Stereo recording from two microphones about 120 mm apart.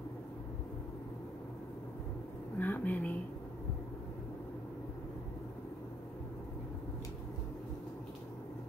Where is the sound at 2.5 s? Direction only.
15° left (ahead or behind).